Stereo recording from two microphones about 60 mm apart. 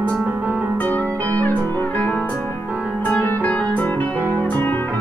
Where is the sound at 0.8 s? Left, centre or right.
Left.